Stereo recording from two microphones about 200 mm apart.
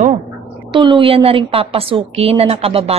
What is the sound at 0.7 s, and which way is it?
A woman's voice, 25° right (ahead or behind).